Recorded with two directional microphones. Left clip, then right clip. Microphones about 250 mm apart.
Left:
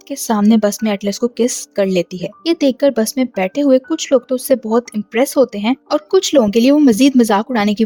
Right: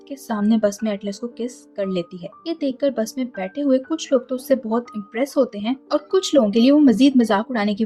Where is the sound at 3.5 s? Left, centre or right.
Left.